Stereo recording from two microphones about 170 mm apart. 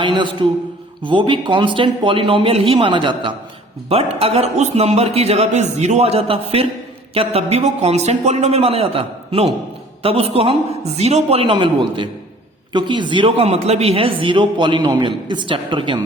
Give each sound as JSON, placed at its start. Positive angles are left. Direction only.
{"t": 0.0, "sound": "a man's voice", "side_deg": -30}